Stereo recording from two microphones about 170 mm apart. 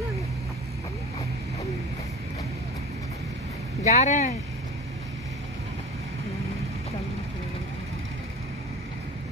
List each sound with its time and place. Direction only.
3.8 s speech: 45° left (ahead or behind)